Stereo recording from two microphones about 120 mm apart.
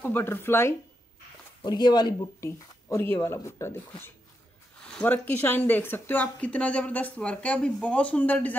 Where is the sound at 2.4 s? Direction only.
20° left (ahead or behind).